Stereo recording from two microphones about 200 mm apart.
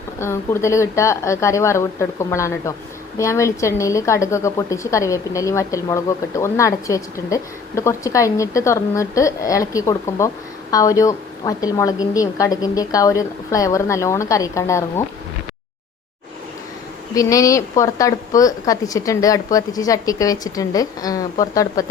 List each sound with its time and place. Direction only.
0.2 s a woman's voice: 15° left (ahead or behind)
17.2 s a woman's voice: 15° left (ahead or behind)